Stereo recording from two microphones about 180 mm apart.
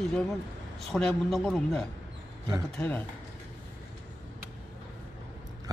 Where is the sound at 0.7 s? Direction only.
Centre (ahead or behind).